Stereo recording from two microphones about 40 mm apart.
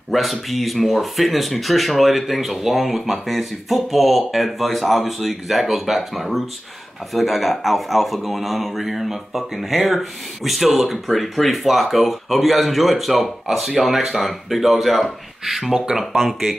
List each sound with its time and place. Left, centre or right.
0.1 s speech: centre